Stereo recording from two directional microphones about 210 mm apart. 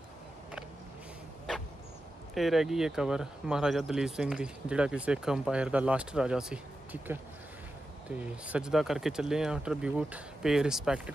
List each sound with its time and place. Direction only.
2.3 s speech: centre (ahead or behind)